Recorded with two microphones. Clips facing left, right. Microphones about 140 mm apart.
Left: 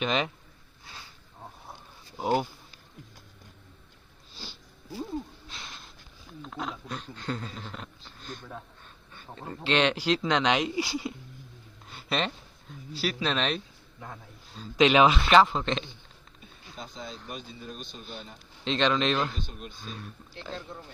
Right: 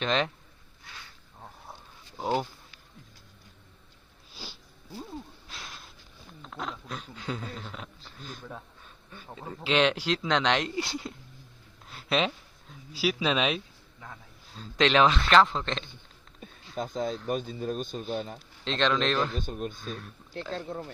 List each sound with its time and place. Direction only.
0.0 s speech: 5° left (ahead or behind)
4.4 s sneeze: 10° right (ahead or behind)
5.5 s a sound: centre (ahead or behind)
9.1 s speech: 5° right (ahead or behind)
14.5 s speech: 5° left (ahead or behind)
16.7 s speech: 45° right (ahead or behind)
18.6 s speech: centre (ahead or behind)
19.4 s speech: 45° right (ahead or behind)
19.8 s speech: centre (ahead or behind)
20.6 s speech: 55° right (ahead or behind)